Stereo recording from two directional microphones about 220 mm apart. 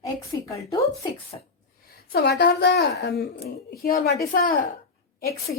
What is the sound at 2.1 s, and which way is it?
A woman's voice, 50° left (ahead or behind).